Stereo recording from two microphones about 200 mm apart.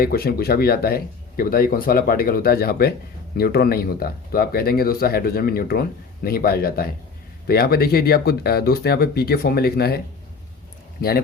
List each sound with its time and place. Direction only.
0.0 s speech: 50° left (ahead or behind)
11.0 s speech: 50° left (ahead or behind)